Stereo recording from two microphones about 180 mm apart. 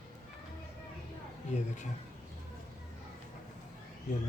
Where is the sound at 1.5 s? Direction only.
40° left (ahead or behind).